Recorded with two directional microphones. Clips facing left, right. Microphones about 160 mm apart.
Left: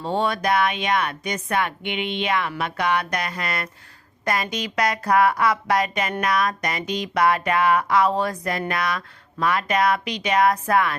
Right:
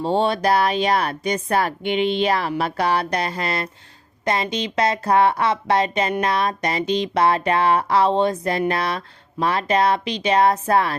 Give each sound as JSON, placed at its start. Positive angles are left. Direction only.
{"t": 0.0, "sound": "a woman's voice", "side_deg": -30}